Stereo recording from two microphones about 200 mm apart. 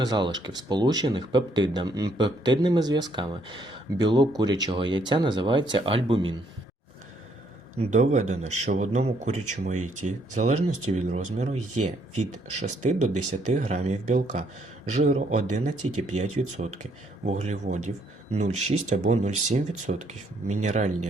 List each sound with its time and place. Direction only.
0.0 s speech: 20° right (ahead or behind)
7.8 s speech: 35° right (ahead or behind)